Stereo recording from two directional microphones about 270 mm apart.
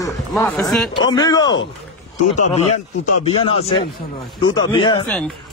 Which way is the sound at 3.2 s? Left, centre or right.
Left.